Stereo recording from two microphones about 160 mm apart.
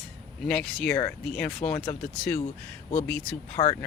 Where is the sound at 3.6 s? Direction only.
25° left (ahead or behind).